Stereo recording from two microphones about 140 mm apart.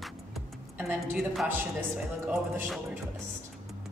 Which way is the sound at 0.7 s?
10° right (ahead or behind).